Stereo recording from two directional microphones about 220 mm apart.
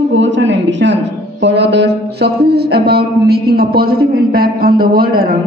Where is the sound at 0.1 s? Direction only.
55° right (ahead or behind).